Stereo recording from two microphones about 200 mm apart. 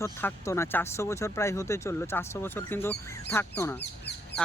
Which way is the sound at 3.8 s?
55° left (ahead or behind).